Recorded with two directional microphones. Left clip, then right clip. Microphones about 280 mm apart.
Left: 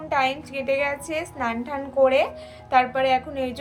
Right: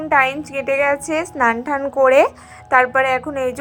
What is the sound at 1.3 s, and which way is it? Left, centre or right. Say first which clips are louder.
A woman's voice: right 10 dB; right.